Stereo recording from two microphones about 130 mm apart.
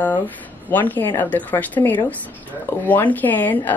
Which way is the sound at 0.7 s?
15° left (ahead or behind).